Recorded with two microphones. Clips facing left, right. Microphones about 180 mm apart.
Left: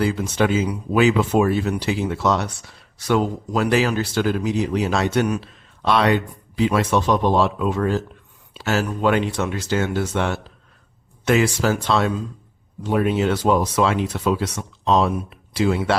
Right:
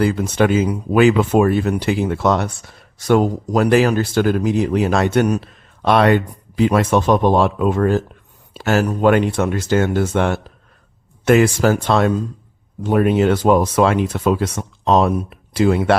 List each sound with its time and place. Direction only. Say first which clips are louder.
0.0 s speech: right 4 dB; 55° right (ahead or behind)